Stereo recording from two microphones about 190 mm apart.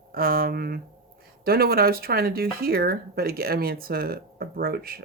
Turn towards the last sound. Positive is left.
turn(degrees=-50)  # may be behind; listen again after turning